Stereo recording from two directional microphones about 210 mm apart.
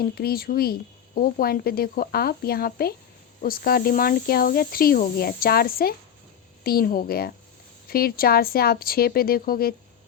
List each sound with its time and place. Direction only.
0.0 s speech: 45° left (ahead or behind)